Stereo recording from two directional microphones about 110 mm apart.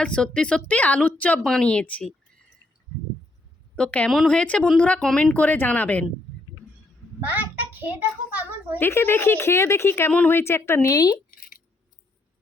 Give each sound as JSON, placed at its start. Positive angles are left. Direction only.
{"t": 0.0, "sound": "a woman's voice", "side_deg": 10}
{"t": 3.8, "sound": "a woman's voice", "side_deg": 10}
{"t": 7.2, "sound": "a child's voice", "side_deg": -15}
{"t": 8.8, "sound": "a woman's voice", "side_deg": 20}